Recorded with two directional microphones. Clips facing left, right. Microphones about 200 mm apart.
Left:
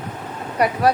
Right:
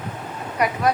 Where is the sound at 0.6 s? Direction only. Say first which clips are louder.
Left 3 dB; 30° left (ahead or behind).